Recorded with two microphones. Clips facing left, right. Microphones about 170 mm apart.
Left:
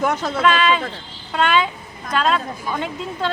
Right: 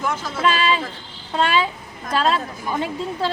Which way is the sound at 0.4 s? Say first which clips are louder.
Left 2 dB; 30° right (ahead or behind).